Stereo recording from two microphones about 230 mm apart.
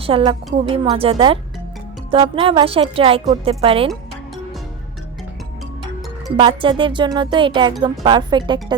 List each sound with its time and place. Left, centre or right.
0.0 s speech: right
6.3 s speech: right